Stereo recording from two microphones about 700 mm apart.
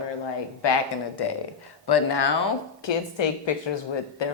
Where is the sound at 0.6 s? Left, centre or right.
Left.